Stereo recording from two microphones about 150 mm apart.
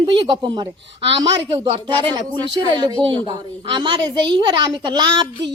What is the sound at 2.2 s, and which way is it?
A woman's voice, 30° right (ahead or behind).